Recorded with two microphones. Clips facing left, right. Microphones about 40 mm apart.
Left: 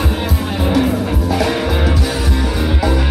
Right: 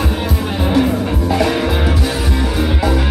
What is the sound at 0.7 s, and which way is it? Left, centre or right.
Music, centre.